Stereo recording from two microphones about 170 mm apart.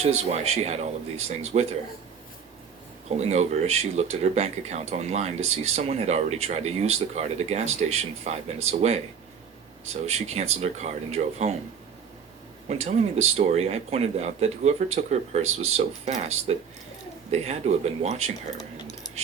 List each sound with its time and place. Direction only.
0.0 s speech: 40° right (ahead or behind)
3.2 s speech: 40° right (ahead or behind)
12.6 s speech: 40° right (ahead or behind)